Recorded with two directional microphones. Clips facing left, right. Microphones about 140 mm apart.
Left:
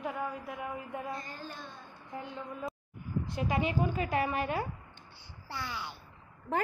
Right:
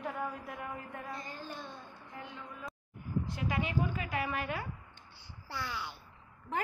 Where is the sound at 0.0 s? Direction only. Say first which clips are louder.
Left 2 dB; 10° left (ahead or behind).